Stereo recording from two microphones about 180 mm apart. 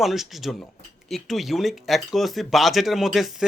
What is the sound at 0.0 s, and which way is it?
Speech, centre (ahead or behind).